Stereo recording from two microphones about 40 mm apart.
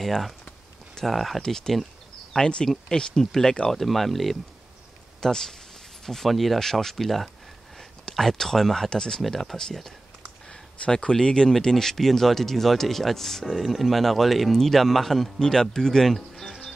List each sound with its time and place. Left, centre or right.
0.0 s speech: centre
1.4 s speech: centre
9.2 s speech: centre
10.5 s speech: left; by 16.6 s centre